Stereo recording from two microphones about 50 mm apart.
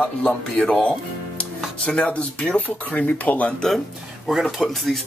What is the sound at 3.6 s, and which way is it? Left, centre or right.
Speech, centre.